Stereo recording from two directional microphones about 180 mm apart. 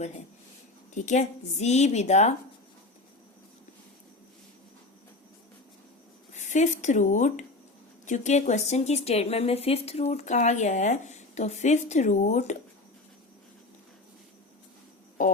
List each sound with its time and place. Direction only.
1.0 s a woman's voice: 40° left (ahead or behind)
6.3 s a woman's voice: 40° left (ahead or behind)
15.2 s speech: 50° left (ahead or behind)